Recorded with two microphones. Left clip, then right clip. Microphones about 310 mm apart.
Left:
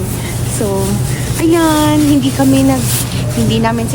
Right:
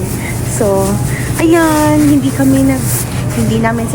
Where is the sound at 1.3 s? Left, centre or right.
Centre.